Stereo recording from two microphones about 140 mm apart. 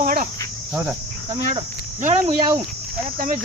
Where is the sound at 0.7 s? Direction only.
5° right (ahead or behind).